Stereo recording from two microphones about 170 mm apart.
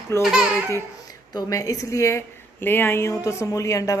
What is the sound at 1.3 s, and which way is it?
Speech, 20° left (ahead or behind).